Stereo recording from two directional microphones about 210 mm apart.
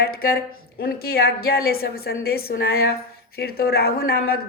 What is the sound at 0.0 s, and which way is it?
A woman's voice, 45° left (ahead or behind).